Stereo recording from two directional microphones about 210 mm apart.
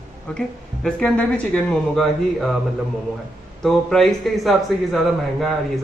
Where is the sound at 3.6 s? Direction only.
Centre (ahead or behind).